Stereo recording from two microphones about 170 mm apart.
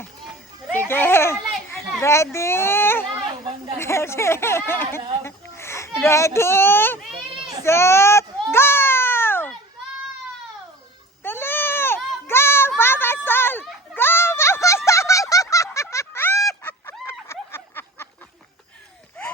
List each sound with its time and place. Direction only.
0.9 s children playing: 15° left (ahead or behind)
2.0 s a child's voice: 15° left (ahead or behind)
7.6 s a sound: 15° left (ahead or behind)
11.2 s goat: 15° left (ahead or behind)
12.3 s a sound: 15° left (ahead or behind)
16.5 s fowl: 10° left (ahead or behind)